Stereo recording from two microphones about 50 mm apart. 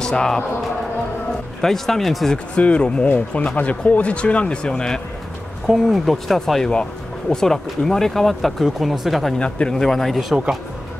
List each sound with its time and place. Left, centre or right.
0.0 s speech: centre
1.6 s speech: centre
2.3 s speech: left
5.7 s speech: centre
9.4 s speech: left
9.8 s speech: centre